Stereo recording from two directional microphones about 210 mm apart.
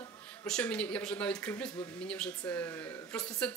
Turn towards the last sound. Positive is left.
turn(degrees=5)  # may be behind; listen again after turning